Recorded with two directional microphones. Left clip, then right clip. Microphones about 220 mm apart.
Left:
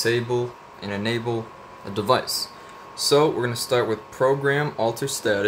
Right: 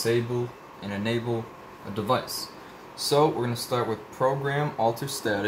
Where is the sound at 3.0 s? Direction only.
35° left (ahead or behind).